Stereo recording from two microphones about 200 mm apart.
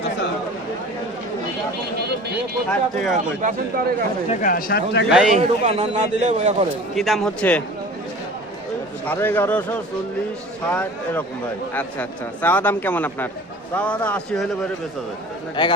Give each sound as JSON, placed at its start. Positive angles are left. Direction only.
{"t": 2.6, "sound": "speech", "side_deg": 0}
{"t": 3.4, "sound": "speech", "side_deg": -35}
{"t": 4.3, "sound": "speech", "side_deg": 40}
{"t": 5.1, "sound": "speech", "side_deg": -5}
{"t": 5.4, "sound": "speech", "side_deg": -35}
{"t": 6.9, "sound": "speech", "side_deg": 0}
{"t": 9.0, "sound": "a man's voice", "side_deg": 10}
{"t": 15.6, "sound": "a man's voice", "side_deg": 20}